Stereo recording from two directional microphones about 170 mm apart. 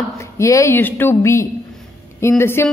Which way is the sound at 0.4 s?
15° left (ahead or behind).